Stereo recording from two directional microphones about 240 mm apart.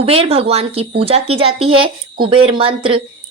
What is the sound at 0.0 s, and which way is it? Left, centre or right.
Speech, right.